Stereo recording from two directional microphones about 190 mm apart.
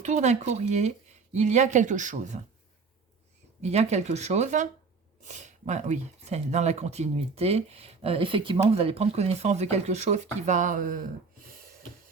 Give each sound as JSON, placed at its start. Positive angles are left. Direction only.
{"t": 0.0, "sound": "speech", "side_deg": -35}
{"t": 3.6, "sound": "speech", "side_deg": -35}